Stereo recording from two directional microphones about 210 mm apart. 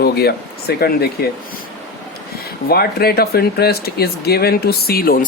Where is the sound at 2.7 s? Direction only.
45° left (ahead or behind).